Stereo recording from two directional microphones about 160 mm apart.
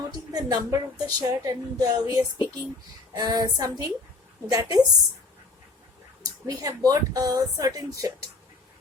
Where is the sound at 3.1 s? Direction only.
25° right (ahead or behind).